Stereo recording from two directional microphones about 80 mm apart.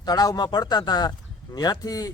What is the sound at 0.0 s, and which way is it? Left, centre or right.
Speech, left.